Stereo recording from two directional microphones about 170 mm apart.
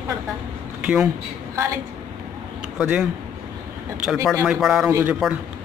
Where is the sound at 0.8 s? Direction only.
5° right (ahead or behind).